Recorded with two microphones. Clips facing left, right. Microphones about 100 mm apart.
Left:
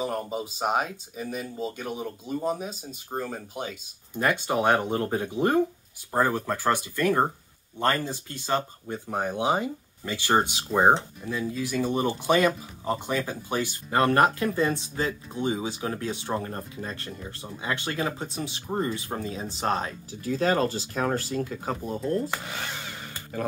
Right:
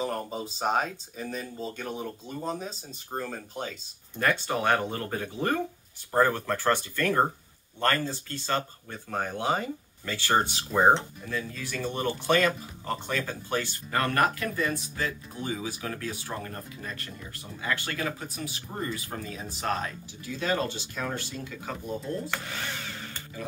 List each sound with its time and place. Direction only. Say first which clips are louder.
0.0 s speech: left 2 dB; 10° left (ahead or behind); by 20.2 s 30° left (ahead or behind)
20.2 s speech: left 5 dB; 40° left (ahead or behind)
22.3 s speech: left 1 dB; 20° left (ahead or behind)